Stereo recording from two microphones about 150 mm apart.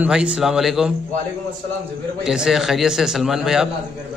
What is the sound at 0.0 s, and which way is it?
Speech, 5° right (ahead or behind).